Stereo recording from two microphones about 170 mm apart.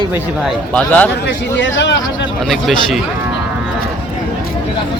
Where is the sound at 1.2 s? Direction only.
90° left.